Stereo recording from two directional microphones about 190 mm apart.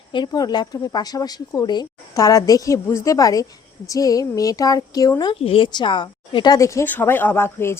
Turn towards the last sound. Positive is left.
turn(degrees=15)  # may be behind; listen again after turning